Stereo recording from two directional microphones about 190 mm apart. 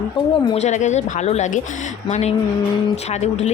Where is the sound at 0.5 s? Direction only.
35° left (ahead or behind).